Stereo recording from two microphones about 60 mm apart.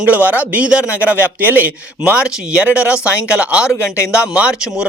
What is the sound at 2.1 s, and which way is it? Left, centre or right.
A man's voice, centre.